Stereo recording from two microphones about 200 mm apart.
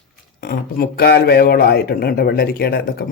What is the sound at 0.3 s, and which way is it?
Speech, 50° left (ahead or behind).